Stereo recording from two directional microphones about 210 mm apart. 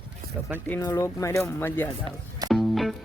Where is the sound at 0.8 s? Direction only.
15° left (ahead or behind).